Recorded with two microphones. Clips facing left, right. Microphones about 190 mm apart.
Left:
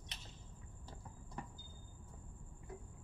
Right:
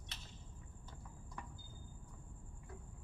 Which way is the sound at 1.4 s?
30° left (ahead or behind).